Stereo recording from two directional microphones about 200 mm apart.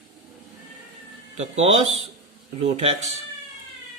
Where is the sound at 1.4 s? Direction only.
30° right (ahead or behind).